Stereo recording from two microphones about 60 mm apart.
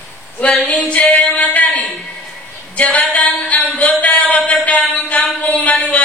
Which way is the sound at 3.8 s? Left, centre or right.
Left.